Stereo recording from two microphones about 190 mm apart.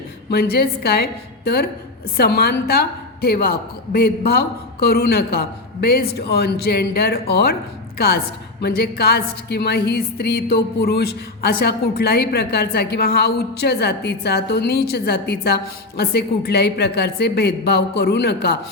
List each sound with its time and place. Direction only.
0.3 s a woman's voice: 55° left (ahead or behind)